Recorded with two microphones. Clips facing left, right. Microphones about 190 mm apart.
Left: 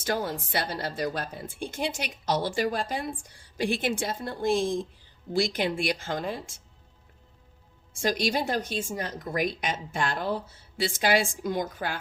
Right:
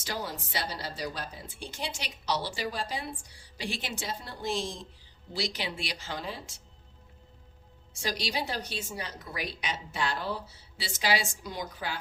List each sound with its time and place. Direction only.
0.0 s speech: 55° left (ahead or behind)
7.9 s speech: 50° left (ahead or behind)